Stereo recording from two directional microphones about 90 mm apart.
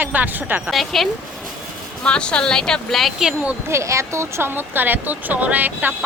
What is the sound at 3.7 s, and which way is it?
Speech, 35° right (ahead or behind).